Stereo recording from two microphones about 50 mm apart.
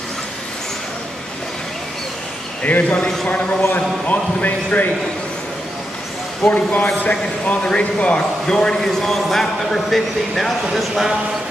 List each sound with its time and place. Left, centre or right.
2.6 s a man's voice: left
6.5 s a man's voice: left; by 11.1 s centre